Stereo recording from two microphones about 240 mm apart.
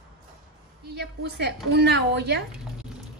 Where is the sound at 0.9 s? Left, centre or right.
Right.